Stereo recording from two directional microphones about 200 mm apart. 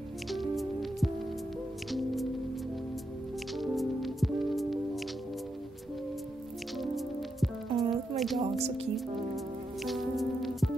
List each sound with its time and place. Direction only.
0.3 s music: centre (ahead or behind)
3.5 s music: centre (ahead or behind)
6.8 s music: centre (ahead or behind)
8.2 s a sound: centre (ahead or behind)
8.5 s music: 30° right (ahead or behind)
9.8 s music: centre (ahead or behind)